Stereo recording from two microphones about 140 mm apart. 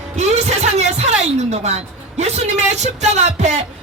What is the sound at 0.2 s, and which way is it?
Music, 55° right (ahead or behind).